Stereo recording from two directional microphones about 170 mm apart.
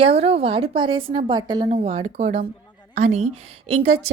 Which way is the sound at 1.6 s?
40° right (ahead or behind).